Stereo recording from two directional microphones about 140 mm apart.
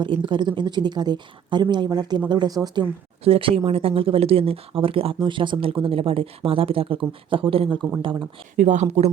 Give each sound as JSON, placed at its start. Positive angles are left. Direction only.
{"t": 0.0, "sound": "speech", "side_deg": -35}
{"t": 3.2, "sound": "speech", "side_deg": -45}
{"t": 8.5, "sound": "speech", "side_deg": -60}